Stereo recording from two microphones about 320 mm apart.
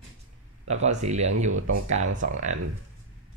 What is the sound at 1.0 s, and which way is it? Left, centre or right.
Speech, centre.